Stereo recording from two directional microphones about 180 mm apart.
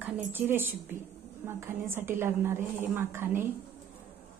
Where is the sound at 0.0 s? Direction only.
10° right (ahead or behind).